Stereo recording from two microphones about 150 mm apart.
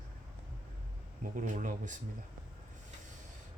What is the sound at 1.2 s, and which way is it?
Speech, 55° right (ahead or behind).